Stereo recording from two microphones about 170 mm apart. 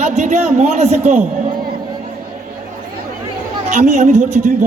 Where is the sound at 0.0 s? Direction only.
45° right (ahead or behind).